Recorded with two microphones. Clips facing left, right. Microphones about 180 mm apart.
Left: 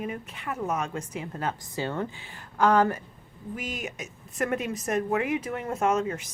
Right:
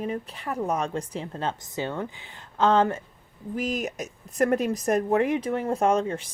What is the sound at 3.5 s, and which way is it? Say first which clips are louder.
Speech: right 7 dB; 35° right (ahead or behind).